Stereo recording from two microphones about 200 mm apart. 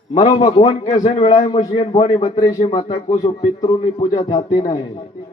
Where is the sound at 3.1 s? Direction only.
20° left (ahead or behind).